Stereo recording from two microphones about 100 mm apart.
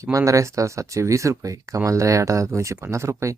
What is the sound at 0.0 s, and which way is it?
Speech, 30° right (ahead or behind).